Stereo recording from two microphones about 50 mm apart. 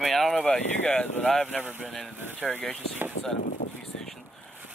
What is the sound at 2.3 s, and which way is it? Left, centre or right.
Speech, left.